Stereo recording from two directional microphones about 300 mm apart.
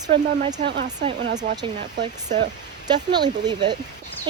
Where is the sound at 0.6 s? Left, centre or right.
Right.